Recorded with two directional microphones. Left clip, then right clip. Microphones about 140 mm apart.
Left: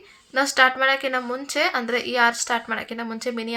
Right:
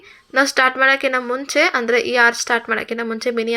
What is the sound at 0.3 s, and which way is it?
A woman's voice, 25° right (ahead or behind).